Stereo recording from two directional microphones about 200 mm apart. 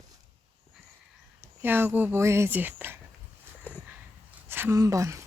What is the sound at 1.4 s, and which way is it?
Speech, 10° right (ahead or behind).